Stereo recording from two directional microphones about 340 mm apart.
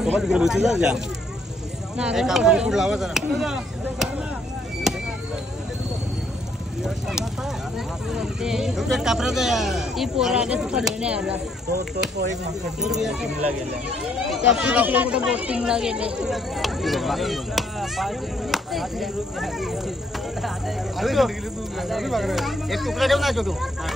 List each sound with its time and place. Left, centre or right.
0.0 s speech: centre
6.8 s a sound: centre
8.1 s speech: centre
11.7 s speech: right
12.8 s speech: centre
14.3 s speech: centre